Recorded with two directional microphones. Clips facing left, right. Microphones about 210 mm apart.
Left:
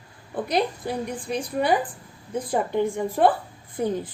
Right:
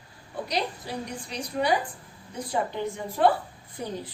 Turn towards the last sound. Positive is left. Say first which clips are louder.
# left 9 dB
turn(degrees=55)  # may be behind; listen again after turning